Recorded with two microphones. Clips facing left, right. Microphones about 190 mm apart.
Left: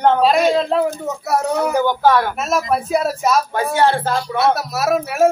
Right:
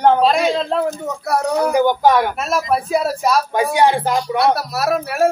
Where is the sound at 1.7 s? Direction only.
15° right (ahead or behind).